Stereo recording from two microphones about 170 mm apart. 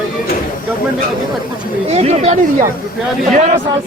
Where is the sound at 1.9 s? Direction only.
40° right (ahead or behind).